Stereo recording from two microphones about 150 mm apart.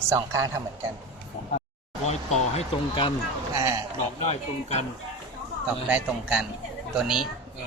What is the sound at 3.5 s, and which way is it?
Speech, 25° right (ahead or behind).